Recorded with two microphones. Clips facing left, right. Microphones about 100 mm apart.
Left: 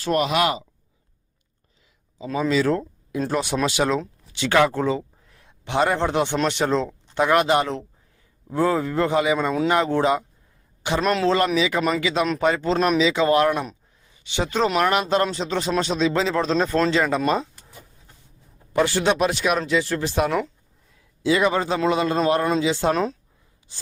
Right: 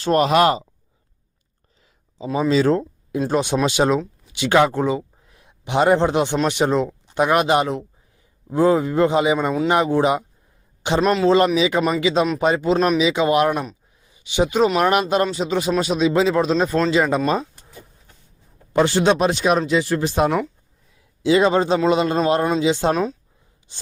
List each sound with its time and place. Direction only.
0.0 s speech: 35° right (ahead or behind)
2.1 s speech: 25° right (ahead or behind)
11.0 s a man's voice: 5° right (ahead or behind)
11.3 s speech: 20° right (ahead or behind)
13.5 s a sound: 10° right (ahead or behind)
14.8 s speech: 20° right (ahead or behind)
18.7 s speech: 25° right (ahead or behind)